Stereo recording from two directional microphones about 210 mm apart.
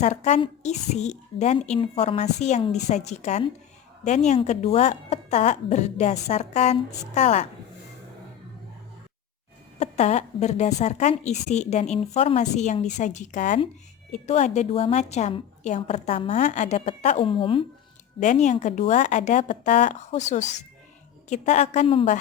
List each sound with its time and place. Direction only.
0.0 s a woman's voice: 35° left (ahead or behind)
9.7 s a woman's voice: 30° left (ahead or behind)
18.2 s a woman's voice: 35° left (ahead or behind)